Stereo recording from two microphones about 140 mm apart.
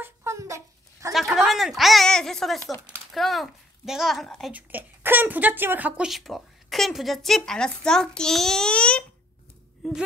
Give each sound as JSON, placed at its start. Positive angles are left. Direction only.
{"t": 0.0, "sound": "a sound", "side_deg": -20}
{"t": 1.1, "sound": "speech", "side_deg": 0}
{"t": 4.5, "sound": "speech", "side_deg": -10}